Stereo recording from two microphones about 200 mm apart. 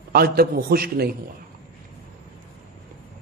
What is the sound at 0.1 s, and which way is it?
A man's voice, 50° right (ahead or behind).